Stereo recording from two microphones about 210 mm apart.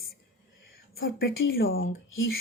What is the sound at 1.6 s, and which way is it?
Speech, 70° left (ahead or behind).